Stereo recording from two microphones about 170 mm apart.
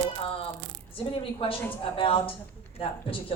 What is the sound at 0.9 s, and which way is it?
Speech, 30° left (ahead or behind).